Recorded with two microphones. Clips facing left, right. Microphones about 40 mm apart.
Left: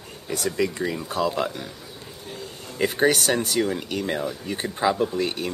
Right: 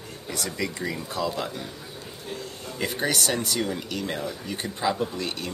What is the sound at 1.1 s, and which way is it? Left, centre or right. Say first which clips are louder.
Speech: left 5 dB; left.